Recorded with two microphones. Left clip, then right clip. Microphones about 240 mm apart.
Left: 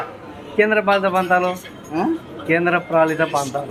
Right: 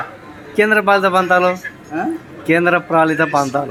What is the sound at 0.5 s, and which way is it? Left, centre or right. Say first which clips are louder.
A man's voice: right 3 dB; right.